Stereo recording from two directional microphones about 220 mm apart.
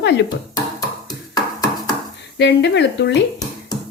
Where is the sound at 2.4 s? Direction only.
50° left (ahead or behind).